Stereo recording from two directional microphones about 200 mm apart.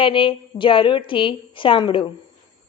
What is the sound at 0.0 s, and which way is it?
A woman's voice, 25° left (ahead or behind).